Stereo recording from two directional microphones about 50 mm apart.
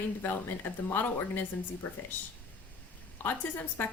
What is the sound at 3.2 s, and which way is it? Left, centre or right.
Speech, left.